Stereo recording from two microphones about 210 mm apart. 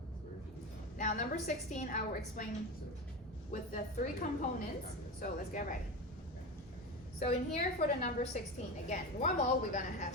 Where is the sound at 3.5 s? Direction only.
35° left (ahead or behind).